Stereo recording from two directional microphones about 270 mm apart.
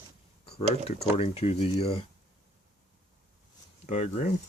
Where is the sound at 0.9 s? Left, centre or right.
Left.